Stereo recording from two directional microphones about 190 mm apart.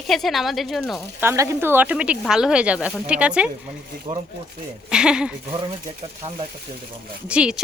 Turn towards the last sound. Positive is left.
turn(degrees=-5)  # may be behind; listen again after turning